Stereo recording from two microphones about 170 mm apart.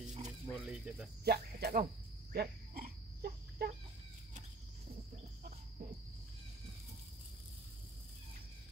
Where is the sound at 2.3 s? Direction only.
65° right (ahead or behind).